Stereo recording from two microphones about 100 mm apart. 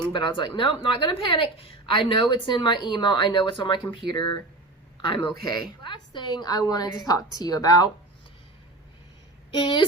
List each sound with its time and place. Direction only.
0.1 s a woman's voice: 55° left (ahead or behind)
4.0 s speech: 5° right (ahead or behind)
5.0 s a woman's voice: 55° left (ahead or behind); by 7.9 s 40° left (ahead or behind)
9.6 s a woman's voice: 55° left (ahead or behind)